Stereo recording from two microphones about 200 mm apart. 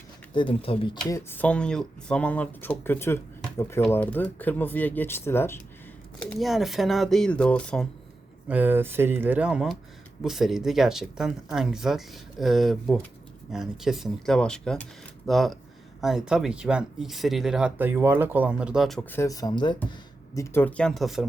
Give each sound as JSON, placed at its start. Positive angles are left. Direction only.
{"t": 0.3, "sound": "speech", "side_deg": 25}
{"t": 1.1, "sound": "speech", "side_deg": 10}
{"t": 8.4, "sound": "speech", "side_deg": -10}
{"t": 19.1, "sound": "speech", "side_deg": 15}